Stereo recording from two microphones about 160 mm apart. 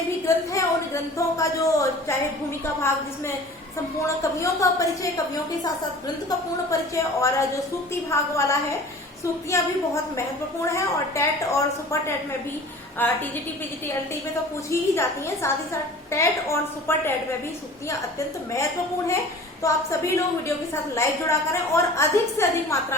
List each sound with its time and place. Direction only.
0.3 s a woman's voice: 20° left (ahead or behind)
4.0 s a woman's voice: 20° left (ahead or behind)
6.7 s a woman's voice: 20° left (ahead or behind)
14.7 s a woman's voice: 15° left (ahead or behind)
18.5 s a woman's voice: 20° left (ahead or behind)